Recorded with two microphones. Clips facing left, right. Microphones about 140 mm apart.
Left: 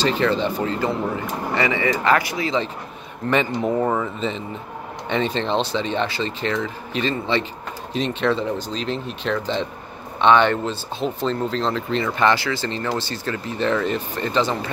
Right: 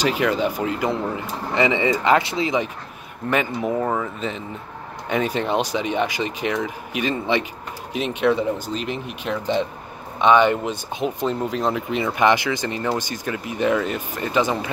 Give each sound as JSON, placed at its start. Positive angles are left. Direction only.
{"t": 0.0, "sound": "speech", "side_deg": -10}
{"t": 3.3, "sound": "speech", "side_deg": -5}